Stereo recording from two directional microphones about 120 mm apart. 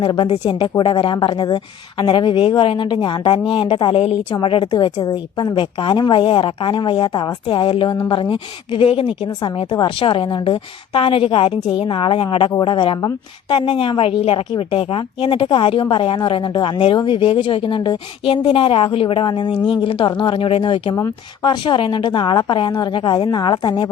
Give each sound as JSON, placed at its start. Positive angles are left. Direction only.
{"t": 0.0, "sound": "a woman's voice", "side_deg": 40}
{"t": 3.9, "sound": "a woman's voice", "side_deg": 60}
{"t": 4.4, "sound": "a woman's voice", "side_deg": 45}